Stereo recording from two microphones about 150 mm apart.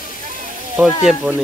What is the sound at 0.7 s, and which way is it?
Speech, 5° right (ahead or behind).